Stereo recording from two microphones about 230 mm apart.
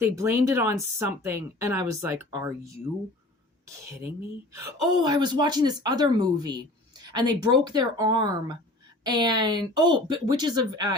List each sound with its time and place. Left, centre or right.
0.0 s a woman's voice: centre
4.5 s a woman's voice: centre